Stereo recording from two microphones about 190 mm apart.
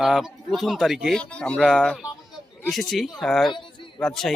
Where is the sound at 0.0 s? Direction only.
Centre (ahead or behind).